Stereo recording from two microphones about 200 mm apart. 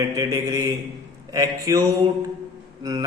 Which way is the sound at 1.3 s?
20° right (ahead or behind).